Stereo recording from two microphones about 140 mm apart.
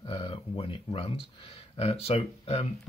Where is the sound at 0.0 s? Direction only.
35° left (ahead or behind).